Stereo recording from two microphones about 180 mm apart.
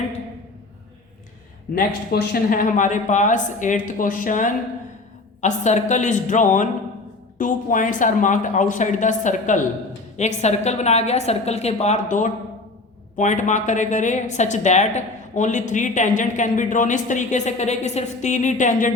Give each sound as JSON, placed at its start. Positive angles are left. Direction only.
{"t": 2.3, "sound": "a woman's voice", "side_deg": 50}